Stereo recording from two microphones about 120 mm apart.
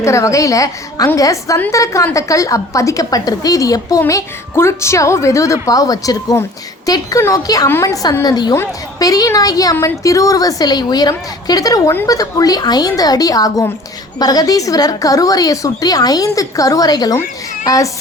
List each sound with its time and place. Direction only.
0.0 s a woman's voice: 25° left (ahead or behind)